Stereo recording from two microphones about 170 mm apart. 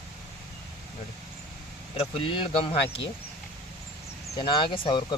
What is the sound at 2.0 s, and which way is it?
Speech, 30° left (ahead or behind).